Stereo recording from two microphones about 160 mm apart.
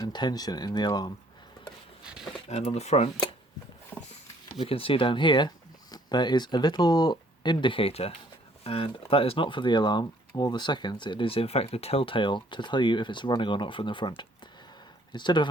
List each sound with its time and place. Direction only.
0.0 s speech: 25° left (ahead or behind)
2.0 s speech: 5° right (ahead or behind)
2.5 s speech: 45° left (ahead or behind)
3.9 s a sound: 10° left (ahead or behind)
4.6 s speech: 35° left (ahead or behind)
15.1 s speech: 30° left (ahead or behind)